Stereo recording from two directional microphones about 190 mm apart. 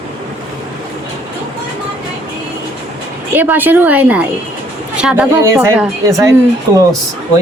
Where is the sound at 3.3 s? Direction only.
10° right (ahead or behind).